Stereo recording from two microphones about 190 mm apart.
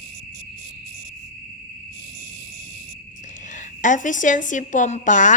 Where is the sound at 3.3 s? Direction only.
40° left (ahead or behind).